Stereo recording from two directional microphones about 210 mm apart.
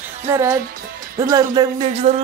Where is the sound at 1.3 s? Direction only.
20° right (ahead or behind).